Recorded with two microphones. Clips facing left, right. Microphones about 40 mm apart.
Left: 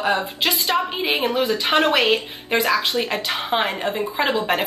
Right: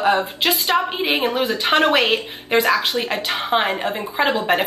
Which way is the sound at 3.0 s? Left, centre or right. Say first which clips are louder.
Right 1 dB; centre.